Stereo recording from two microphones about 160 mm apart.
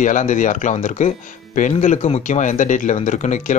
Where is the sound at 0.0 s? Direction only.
50° left (ahead or behind).